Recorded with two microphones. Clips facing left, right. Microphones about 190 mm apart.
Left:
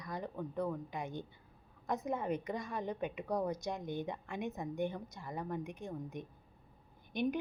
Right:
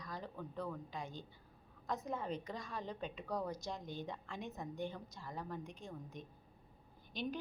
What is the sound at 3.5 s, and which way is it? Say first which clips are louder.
Speech: left 6 dB; 55° left (ahead or behind).